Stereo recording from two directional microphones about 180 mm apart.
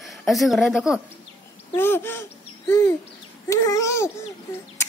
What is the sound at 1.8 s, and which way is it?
Babbling, 10° left (ahead or behind).